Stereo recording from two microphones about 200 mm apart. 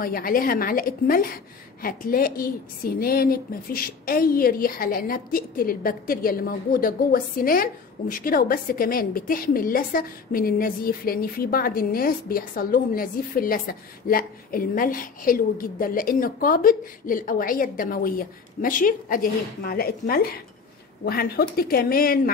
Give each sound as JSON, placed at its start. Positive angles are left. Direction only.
{"t": 0.0, "sound": "a woman's voice", "side_deg": 45}